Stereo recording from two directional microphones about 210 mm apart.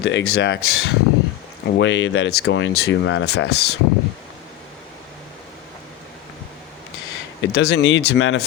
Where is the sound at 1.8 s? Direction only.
65° left (ahead or behind).